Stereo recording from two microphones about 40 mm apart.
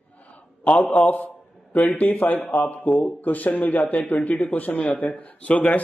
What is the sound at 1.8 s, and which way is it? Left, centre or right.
Speech, left.